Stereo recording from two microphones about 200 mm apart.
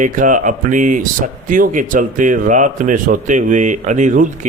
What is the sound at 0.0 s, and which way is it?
Speech, 40° right (ahead or behind).